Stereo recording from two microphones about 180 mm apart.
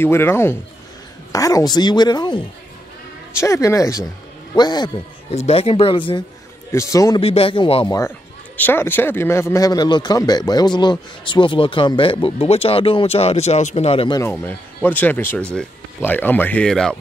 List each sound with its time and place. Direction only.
0.0 s speech: 15° left (ahead or behind)
5.3 s speech: 35° left (ahead or behind); by 7.2 s 20° left (ahead or behind)
7.2 s speech: 30° left (ahead or behind)
8.5 s speech: 10° left (ahead or behind); by 14.2 s 30° left (ahead or behind)
14.2 s speech: 10° left (ahead or behind)